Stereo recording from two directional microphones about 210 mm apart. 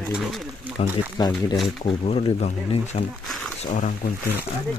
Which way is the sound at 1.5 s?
Centre (ahead or behind).